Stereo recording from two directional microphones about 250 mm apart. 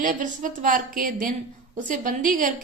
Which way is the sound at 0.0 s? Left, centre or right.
Right.